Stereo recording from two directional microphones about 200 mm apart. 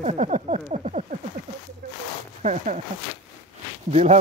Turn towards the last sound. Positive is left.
turn(degrees=-35)  # may be behind; listen again after turning